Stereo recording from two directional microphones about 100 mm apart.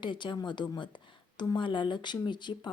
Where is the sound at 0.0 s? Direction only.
55° left (ahead or behind).